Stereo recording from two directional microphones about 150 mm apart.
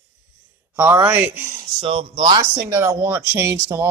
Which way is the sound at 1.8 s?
40° right (ahead or behind).